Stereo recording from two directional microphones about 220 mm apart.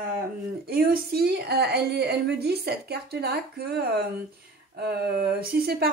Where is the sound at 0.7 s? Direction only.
45° right (ahead or behind).